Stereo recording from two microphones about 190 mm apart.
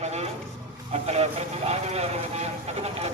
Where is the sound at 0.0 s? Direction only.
35° right (ahead or behind).